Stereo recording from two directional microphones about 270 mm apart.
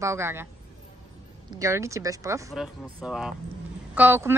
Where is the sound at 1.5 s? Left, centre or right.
Centre.